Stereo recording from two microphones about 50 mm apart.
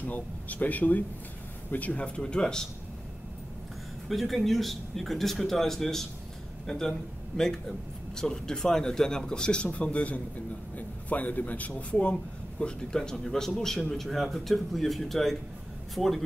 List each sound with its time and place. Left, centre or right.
0.0 s speech: left
2.0 s a man's voice: centre
4.1 s a man's voice: centre